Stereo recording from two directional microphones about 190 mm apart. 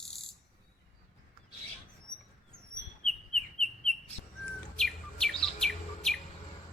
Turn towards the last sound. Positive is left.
turn(degrees=5)  # may be behind; listen again after turning